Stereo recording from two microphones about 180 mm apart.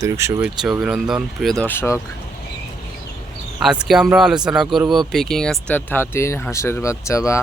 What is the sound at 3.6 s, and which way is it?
Speech, 5° right (ahead or behind).